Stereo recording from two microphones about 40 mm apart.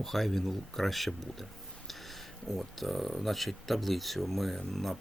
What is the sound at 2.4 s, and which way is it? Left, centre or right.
Speech, centre.